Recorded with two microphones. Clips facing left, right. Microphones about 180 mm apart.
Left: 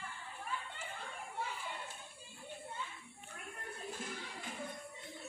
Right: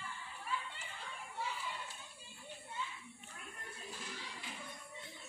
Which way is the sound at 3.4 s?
50° left (ahead or behind).